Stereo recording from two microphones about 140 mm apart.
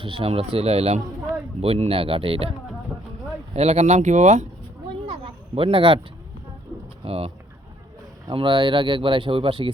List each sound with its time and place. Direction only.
0.0 s speech: 40° right (ahead or behind)
3.5 s speech: 50° right (ahead or behind)
4.9 s a sound: 35° right (ahead or behind)
7.0 s speech: 40° right (ahead or behind)
8.3 s speech: 35° right (ahead or behind)